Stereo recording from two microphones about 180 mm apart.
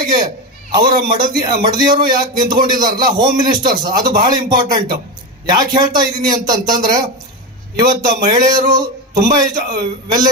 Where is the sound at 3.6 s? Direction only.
50° right (ahead or behind).